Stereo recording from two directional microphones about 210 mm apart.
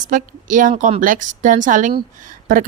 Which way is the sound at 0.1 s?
40° right (ahead or behind).